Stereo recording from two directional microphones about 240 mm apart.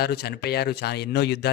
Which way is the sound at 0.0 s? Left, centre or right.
Left.